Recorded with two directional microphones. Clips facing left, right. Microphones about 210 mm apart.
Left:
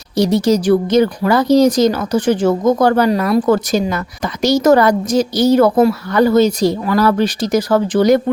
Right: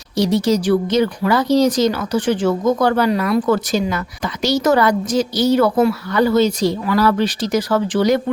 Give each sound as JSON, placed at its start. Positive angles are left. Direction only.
{"t": 0.2, "sound": "speech", "side_deg": 45}